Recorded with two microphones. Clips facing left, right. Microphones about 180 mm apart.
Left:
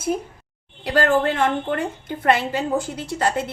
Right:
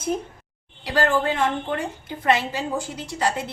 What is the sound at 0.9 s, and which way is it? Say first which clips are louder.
A woman's voice: left 3 dB; 55° left (ahead or behind).